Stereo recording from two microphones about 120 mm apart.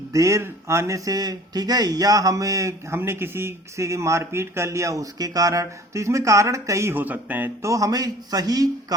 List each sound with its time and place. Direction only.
0.1 s speech: 25° right (ahead or behind)
7.6 s a man's voice: 30° right (ahead or behind)